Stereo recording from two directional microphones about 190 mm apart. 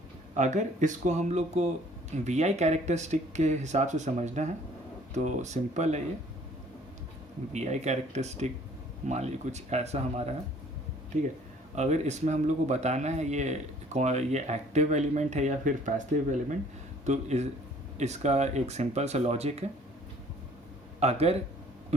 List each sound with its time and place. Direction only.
0.3 s speech: 40° right (ahead or behind)
7.5 s speech: 35° right (ahead or behind)
11.7 s speech: 35° right (ahead or behind)
21.0 s speech: 35° right (ahead or behind)